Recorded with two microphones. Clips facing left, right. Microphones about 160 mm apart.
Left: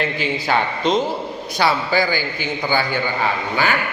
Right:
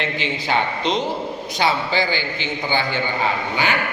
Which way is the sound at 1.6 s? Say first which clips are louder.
Left 2 dB; 20° right (ahead or behind).